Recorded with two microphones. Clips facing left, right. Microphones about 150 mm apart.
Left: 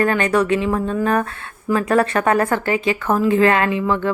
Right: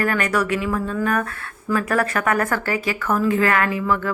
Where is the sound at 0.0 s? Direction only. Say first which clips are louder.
Left 4 dB; 25° left (ahead or behind).